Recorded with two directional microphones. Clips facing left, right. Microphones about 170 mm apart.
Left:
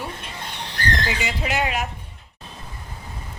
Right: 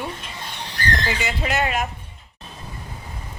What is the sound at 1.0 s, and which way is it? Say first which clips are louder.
Speech: right 1 dB; 5° left (ahead or behind).